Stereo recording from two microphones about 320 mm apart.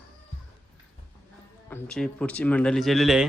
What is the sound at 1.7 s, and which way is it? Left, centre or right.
Speech, centre.